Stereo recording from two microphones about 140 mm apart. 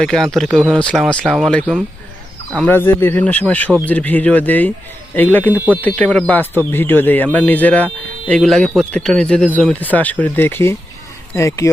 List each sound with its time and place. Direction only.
0.0 s speech: 5° left (ahead or behind)
6.4 s speech: 15° right (ahead or behind)
6.7 s speech: 15° left (ahead or behind)